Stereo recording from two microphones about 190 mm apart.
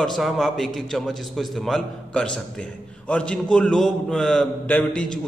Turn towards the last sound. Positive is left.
turn(degrees=5)  # may be behind; listen again after turning